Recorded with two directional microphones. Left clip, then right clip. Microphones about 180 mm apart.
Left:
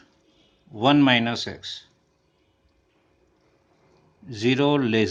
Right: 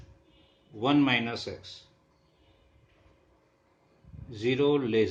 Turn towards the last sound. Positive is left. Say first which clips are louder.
# left 4 dB
turn(degrees=50)  # may be behind; listen again after turning